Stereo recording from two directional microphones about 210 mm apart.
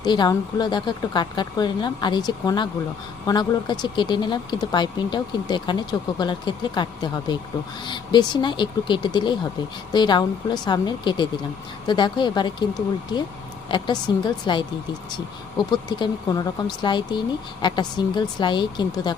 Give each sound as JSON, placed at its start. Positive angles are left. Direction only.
{"t": 0.0, "sound": "speech", "side_deg": 20}